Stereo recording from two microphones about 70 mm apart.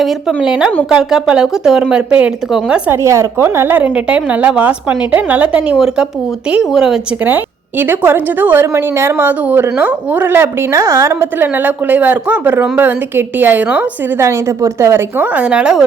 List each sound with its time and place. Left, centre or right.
0.0 s speech: centre
0.4 s speech: centre
2.9 s a woman's voice: right
3.8 s speech: right
5.7 s speech: centre
7.3 s speech: right
8.6 s a woman's voice: right
11.2 s speech: right
14.2 s a woman's voice: right
15.2 s speech: right